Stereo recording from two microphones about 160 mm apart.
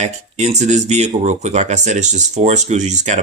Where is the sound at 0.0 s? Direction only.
45° right (ahead or behind).